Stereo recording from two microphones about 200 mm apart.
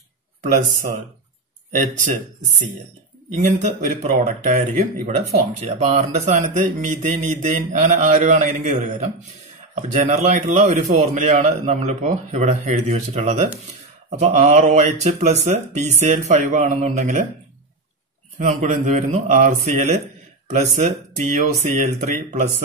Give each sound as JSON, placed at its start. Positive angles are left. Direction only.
{"t": 1.7, "sound": "a man's voice", "side_deg": -40}
{"t": 3.4, "sound": "a man's voice", "side_deg": -35}
{"t": 18.4, "sound": "a man's voice", "side_deg": -40}